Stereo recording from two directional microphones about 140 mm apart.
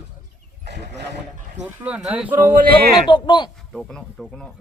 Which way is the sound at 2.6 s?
90° right.